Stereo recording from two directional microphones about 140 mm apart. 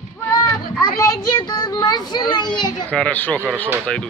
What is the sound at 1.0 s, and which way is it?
A child's voice, 25° left (ahead or behind).